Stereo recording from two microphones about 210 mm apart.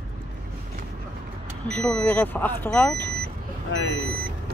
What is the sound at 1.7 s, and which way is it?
Speech, 5° left (ahead or behind).